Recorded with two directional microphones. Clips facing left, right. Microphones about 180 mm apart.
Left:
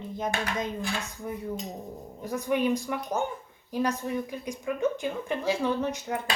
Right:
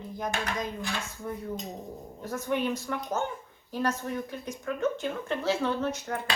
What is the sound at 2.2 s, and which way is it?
Speech, 15° left (ahead or behind).